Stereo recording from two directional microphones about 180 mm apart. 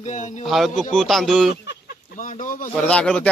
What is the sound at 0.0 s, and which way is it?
Speech, 40° left (ahead or behind).